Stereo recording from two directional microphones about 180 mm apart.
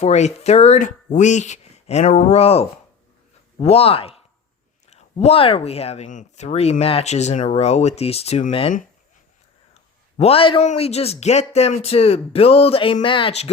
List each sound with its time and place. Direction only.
0.0 s speech: 40° left (ahead or behind)
10.2 s speech: 35° left (ahead or behind)